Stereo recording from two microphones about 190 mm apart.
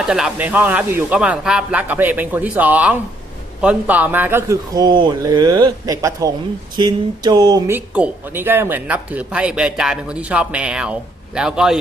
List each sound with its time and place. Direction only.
0.1 s a man's voice: 5° right (ahead or behind)
7.8 s speech: 10° right (ahead or behind)